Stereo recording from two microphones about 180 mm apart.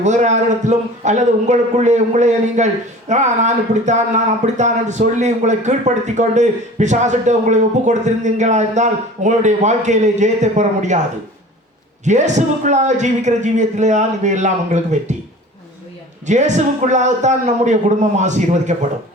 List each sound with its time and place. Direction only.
0.0 s speech: 40° right (ahead or behind)
12.0 s speech: 40° right (ahead or behind)
16.2 s speech: 40° right (ahead or behind)